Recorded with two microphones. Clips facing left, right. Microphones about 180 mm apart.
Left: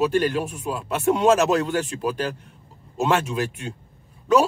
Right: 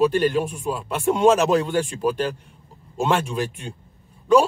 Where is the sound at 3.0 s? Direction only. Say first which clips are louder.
Even; 5° left (ahead or behind).